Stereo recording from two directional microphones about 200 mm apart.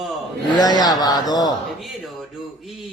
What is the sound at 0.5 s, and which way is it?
Speech, 20° left (ahead or behind).